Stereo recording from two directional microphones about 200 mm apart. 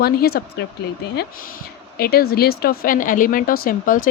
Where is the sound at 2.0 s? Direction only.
50° left (ahead or behind).